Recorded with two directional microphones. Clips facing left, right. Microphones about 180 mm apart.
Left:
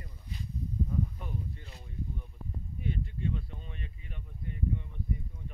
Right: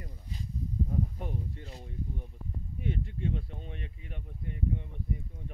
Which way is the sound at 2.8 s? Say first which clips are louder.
Right 1 dB; 80° right.